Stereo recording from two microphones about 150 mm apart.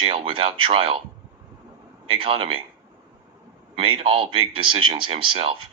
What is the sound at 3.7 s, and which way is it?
Speech, 35° right (ahead or behind).